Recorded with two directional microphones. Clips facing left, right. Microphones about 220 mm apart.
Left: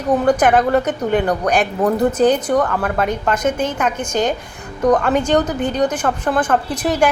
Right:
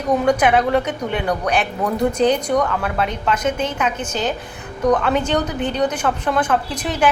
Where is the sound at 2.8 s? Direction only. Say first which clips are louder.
Left 3 dB; 50° left (ahead or behind).